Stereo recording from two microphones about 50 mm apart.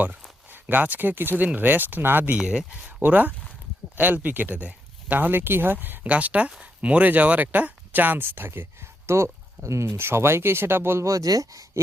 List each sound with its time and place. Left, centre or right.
0.0 s speech: right
2.4 s speech: centre
2.8 s speech: right
6.1 s speech: right
9.0 s speech: right
9.8 s speech: right